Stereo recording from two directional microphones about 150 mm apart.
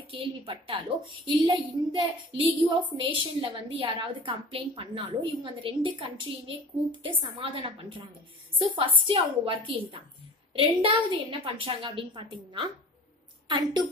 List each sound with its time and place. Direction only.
0.1 s a woman's voice: 35° right (ahead or behind)
8.5 s a woman's voice: 35° right (ahead or behind)